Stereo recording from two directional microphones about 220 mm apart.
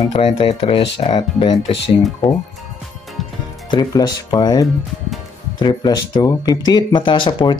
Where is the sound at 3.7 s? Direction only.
20° left (ahead or behind).